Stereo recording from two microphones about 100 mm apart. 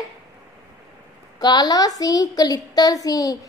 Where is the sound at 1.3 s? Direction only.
45° left (ahead or behind).